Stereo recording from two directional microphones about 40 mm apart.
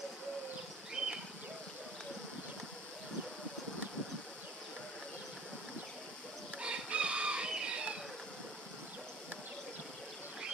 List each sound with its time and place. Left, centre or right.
0.9 s bird: centre
6.6 s chicken: right